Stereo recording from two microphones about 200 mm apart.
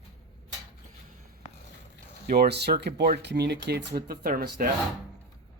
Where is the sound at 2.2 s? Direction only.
50° right (ahead or behind).